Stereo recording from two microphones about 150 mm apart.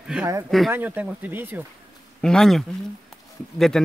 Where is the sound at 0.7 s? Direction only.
15° right (ahead or behind).